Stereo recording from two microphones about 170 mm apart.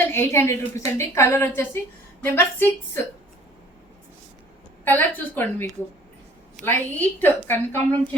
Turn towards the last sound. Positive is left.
turn(degrees=15)  # may be behind; listen again after turning